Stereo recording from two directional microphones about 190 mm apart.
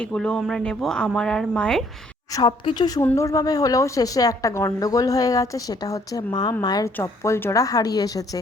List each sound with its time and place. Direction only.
0.0 s speech: 5° left (ahead or behind)
2.3 s a woman's voice: 25° left (ahead or behind)